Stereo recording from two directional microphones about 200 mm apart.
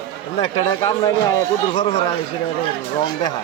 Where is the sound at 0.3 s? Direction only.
25° left (ahead or behind).